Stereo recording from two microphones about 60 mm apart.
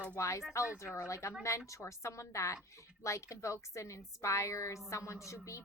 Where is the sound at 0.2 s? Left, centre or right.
Left.